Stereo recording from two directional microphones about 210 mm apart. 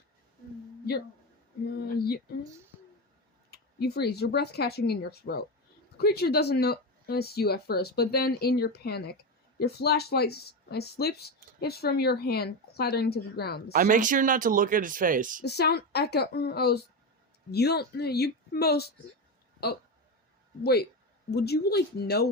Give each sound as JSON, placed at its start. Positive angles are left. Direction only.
{"t": 3.5, "sound": "speech", "side_deg": 50}
{"t": 13.7, "sound": "speech", "side_deg": -40}
{"t": 15.4, "sound": "speech", "side_deg": 50}
{"t": 21.2, "sound": "speech", "side_deg": 50}